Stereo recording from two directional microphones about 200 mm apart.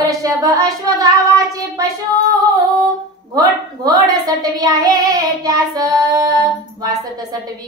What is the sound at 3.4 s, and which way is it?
Female singing, 20° right (ahead or behind).